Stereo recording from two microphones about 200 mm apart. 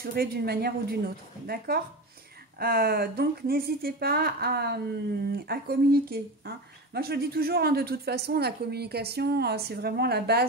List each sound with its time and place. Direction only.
0.0 s speech: 50° right (ahead or behind)